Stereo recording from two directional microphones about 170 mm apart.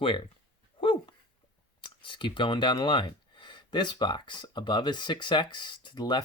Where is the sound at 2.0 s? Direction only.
30° left (ahead or behind).